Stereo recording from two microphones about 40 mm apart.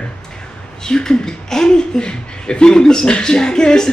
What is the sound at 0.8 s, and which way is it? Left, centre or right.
Speech, centre.